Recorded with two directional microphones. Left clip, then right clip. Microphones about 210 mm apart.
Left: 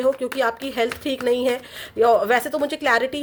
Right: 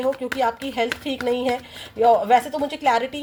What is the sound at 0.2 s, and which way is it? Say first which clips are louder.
A woman's voice: even; 45° left (ahead or behind).